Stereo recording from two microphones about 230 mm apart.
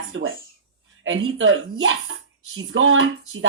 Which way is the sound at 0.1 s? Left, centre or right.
Right.